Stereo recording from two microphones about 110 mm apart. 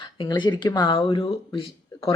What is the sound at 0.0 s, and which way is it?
Speech, 45° left (ahead or behind).